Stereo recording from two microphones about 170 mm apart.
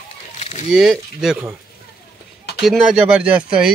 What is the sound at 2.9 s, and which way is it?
Speech, 5° right (ahead or behind).